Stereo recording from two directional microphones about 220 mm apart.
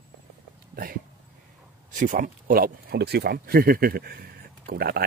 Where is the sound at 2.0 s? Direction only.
35° right (ahead or behind).